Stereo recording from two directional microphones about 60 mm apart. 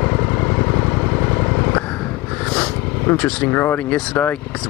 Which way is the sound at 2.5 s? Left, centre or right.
Centre.